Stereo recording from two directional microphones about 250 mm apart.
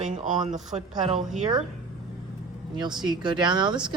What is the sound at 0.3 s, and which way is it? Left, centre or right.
Speech, right.